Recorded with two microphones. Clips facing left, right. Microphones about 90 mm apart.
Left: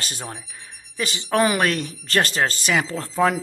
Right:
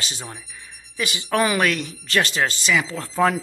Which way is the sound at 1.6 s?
40° left (ahead or behind).